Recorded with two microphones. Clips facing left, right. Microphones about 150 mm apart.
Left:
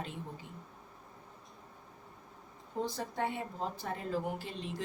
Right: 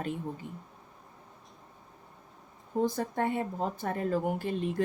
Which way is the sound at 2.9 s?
50° right (ahead or behind).